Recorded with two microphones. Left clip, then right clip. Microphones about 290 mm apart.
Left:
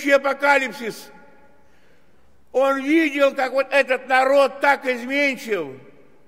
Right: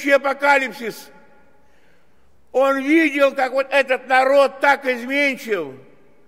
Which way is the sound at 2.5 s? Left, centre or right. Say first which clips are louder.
Right 2 dB; centre.